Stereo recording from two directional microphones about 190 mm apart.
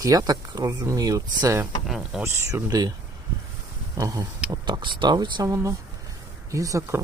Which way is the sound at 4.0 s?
20° right (ahead or behind).